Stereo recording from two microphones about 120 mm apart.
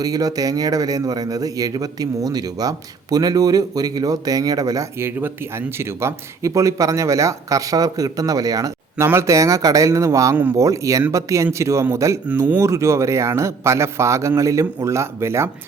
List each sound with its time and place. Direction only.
0.0 s a man's voice: 30° right (ahead or behind)
12.2 s a man's voice: 15° right (ahead or behind)